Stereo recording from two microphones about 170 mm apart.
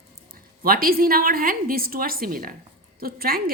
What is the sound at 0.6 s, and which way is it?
A woman's voice, 60° right (ahead or behind).